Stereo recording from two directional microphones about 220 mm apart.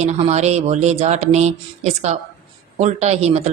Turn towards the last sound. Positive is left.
turn(degrees=-30)  # may be behind; listen again after turning